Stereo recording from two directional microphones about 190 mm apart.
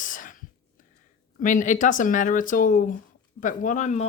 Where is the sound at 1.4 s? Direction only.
45° left (ahead or behind).